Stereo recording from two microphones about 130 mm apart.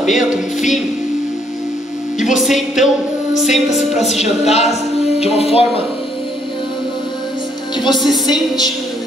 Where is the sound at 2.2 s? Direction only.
Centre (ahead or behind).